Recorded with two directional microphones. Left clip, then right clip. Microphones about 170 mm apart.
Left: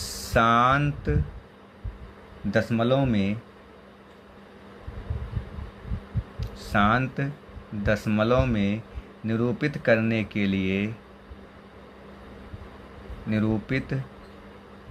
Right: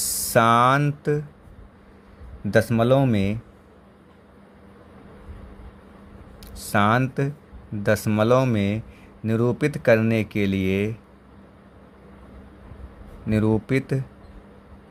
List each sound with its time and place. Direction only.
0.0 s speech: 45° right (ahead or behind)
2.5 s speech: 50° right (ahead or behind)
6.4 s speech: 45° right (ahead or behind)
13.3 s speech: 45° right (ahead or behind)